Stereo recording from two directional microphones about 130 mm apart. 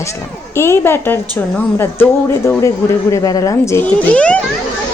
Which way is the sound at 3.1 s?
25° left (ahead or behind).